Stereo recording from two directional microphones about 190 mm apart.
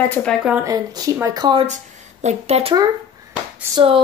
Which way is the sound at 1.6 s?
40° right (ahead or behind).